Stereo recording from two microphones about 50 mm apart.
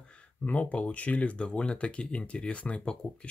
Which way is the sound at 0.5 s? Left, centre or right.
Left.